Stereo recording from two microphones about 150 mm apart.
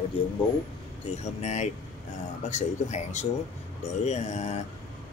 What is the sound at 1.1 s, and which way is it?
Speech, 50° left (ahead or behind).